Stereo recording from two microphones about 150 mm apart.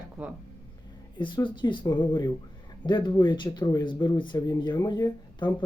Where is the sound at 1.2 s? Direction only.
30° left (ahead or behind).